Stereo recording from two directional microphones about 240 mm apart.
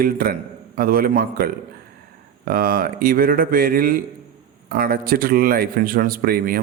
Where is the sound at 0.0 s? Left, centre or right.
Right.